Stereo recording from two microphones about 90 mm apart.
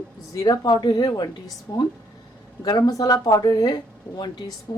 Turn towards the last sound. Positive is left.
turn(degrees=40)  # may be behind; listen again after turning